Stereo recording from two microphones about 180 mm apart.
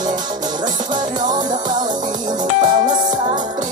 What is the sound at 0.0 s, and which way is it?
Music, 25° right (ahead or behind).